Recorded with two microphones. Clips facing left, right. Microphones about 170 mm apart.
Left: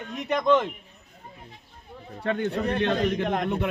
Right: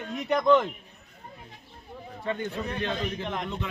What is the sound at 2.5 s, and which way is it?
A man's voice, 65° left (ahead or behind).